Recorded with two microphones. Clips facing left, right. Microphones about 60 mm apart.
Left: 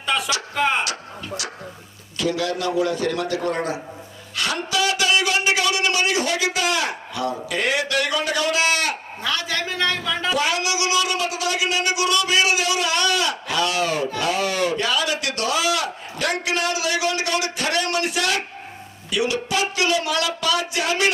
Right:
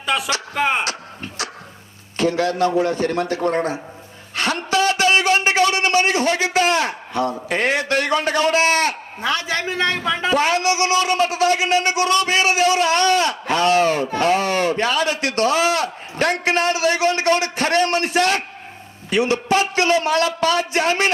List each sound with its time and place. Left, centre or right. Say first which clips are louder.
0.0 s music: right 2 dB; centre
0.5 s speech: right 1 dB; centre
0.9 s a sound: right 1 dB; right
2.1 s speech: right 4 dB; right
4.4 s a sound: right 4 dB; right
19.1 s speech: right 5 dB; right